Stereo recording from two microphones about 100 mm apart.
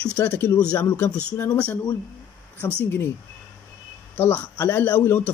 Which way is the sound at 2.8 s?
20° left (ahead or behind).